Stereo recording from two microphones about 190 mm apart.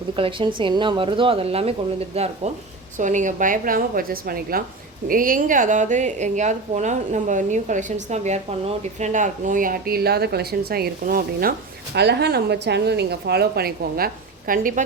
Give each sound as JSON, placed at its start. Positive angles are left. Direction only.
{"t": 0.2, "sound": "a woman's voice", "side_deg": -25}
{"t": 11.9, "sound": "speech", "side_deg": -60}